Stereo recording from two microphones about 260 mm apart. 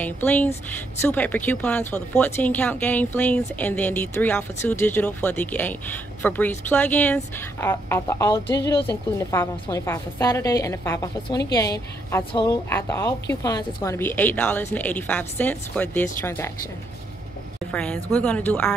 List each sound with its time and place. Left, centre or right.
0.0 s a woman's voice: centre
18.1 s a woman's voice: centre